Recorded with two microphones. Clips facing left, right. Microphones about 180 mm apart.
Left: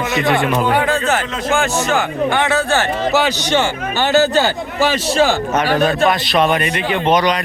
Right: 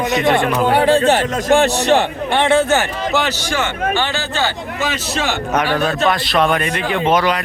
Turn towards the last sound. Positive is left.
turn(degrees=-5)  # may be behind; listen again after turning